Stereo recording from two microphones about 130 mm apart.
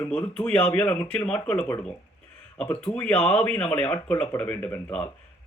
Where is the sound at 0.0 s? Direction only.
10° left (ahead or behind).